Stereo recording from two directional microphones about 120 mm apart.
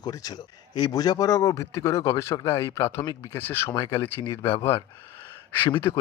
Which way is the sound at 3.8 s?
30° left (ahead or behind).